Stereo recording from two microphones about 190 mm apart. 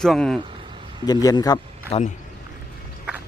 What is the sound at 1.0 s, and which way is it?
Speech, 20° left (ahead or behind).